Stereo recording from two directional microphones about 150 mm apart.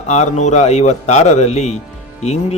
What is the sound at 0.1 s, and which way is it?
Speech, 50° left (ahead or behind).